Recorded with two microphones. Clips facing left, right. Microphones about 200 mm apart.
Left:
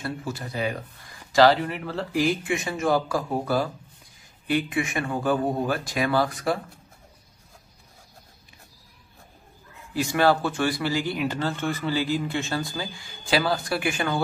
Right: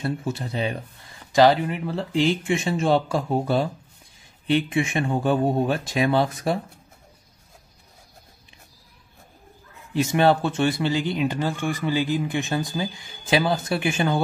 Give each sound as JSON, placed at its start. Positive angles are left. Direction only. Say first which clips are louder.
{"t": 0.0, "sound": "speech", "louder": "right 4 dB", "side_deg": -25}
{"t": 9.9, "sound": "speech", "louder": "right 2 dB", "side_deg": -20}